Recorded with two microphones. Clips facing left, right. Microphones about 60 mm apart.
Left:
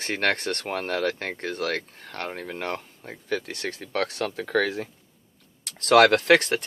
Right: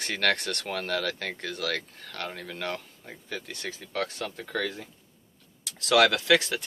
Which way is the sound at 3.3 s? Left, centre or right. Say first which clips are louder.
Left 7 dB; left.